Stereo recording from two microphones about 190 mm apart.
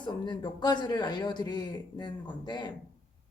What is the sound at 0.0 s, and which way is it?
A man's voice, 25° left (ahead or behind).